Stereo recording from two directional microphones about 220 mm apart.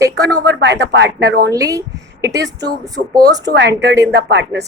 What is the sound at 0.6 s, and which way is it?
Speech, 55° right (ahead or behind).